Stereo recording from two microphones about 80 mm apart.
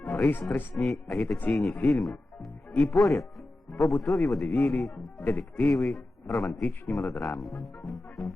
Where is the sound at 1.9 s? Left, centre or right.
Centre.